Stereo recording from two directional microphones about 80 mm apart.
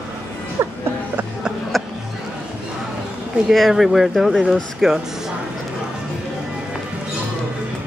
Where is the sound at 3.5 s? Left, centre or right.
Centre.